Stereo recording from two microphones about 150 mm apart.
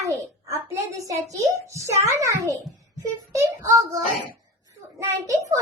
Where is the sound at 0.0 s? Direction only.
20° right (ahead or behind).